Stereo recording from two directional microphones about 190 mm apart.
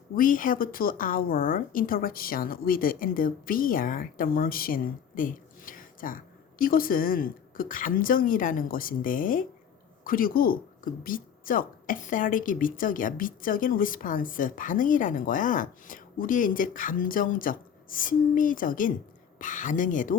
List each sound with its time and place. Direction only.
0.2 s speech: 45° left (ahead or behind)